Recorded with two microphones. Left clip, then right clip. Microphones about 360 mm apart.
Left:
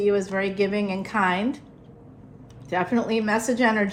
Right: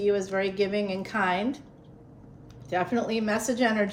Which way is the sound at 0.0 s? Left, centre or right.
Left.